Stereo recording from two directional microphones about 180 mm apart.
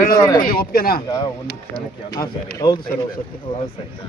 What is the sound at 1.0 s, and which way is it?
Speech, 20° left (ahead or behind).